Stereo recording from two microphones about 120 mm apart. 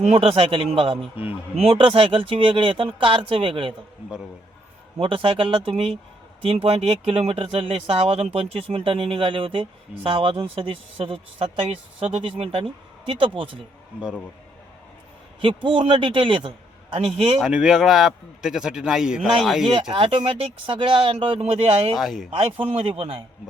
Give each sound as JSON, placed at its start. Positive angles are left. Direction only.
{"t": 0.0, "sound": "speech", "side_deg": -55}
{"t": 4.9, "sound": "speech", "side_deg": -50}
{"t": 15.4, "sound": "speech", "side_deg": -45}
{"t": 17.4, "sound": "a man's voice", "side_deg": -5}
{"t": 20.0, "sound": "speech", "side_deg": -50}
{"t": 21.9, "sound": "a man's voice", "side_deg": 0}
{"t": 22.3, "sound": "speech", "side_deg": -50}